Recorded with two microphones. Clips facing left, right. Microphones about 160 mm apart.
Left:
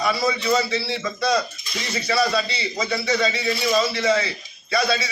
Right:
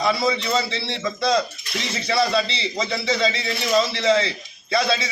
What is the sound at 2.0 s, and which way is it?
A man's voice, 25° right (ahead or behind).